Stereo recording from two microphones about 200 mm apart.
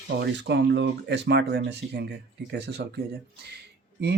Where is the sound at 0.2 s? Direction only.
60° right (ahead or behind).